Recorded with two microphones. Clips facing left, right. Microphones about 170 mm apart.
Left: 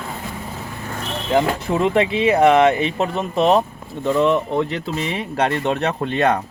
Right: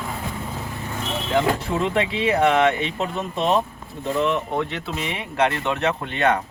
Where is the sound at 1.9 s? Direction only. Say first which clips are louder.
Left 5 dB; 20° left (ahead or behind).